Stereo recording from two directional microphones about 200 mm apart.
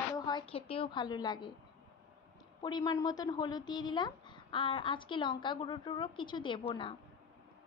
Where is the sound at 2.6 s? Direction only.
20° left (ahead or behind).